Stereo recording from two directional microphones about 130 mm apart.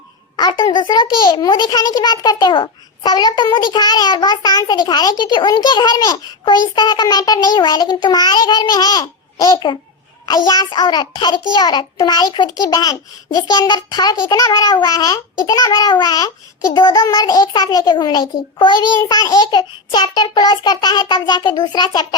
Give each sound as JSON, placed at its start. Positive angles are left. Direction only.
{"t": 0.3, "sound": "a child's voice", "side_deg": 35}